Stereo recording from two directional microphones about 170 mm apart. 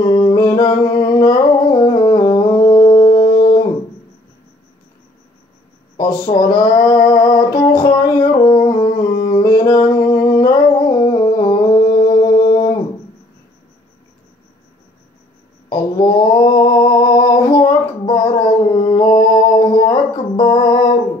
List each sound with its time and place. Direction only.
0.0 s music: 25° left (ahead or behind)
5.9 s music: 25° left (ahead or behind)
15.7 s a sound: 25° left (ahead or behind)